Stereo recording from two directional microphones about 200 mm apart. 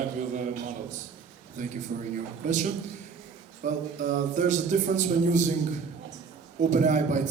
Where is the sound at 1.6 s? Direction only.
35° right (ahead or behind).